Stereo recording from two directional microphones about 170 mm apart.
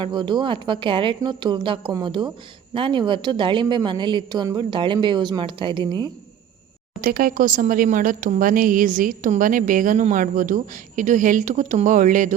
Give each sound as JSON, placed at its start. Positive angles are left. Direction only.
{"t": 0.0, "sound": "a woman's voice", "side_deg": -25}
{"t": 7.0, "sound": "speech", "side_deg": -55}